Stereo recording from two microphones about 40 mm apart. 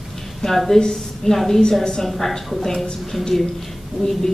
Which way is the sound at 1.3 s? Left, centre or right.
Centre.